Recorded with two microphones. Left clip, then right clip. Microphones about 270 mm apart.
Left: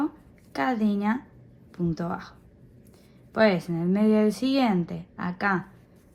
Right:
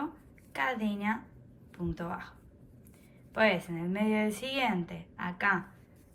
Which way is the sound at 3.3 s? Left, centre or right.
Centre.